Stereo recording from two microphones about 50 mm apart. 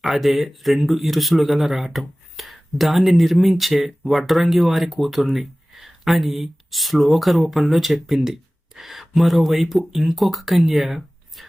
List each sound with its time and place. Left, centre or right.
0.0 s speech: centre